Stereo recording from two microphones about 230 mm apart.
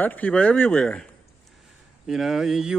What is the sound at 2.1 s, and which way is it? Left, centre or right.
Speech, centre.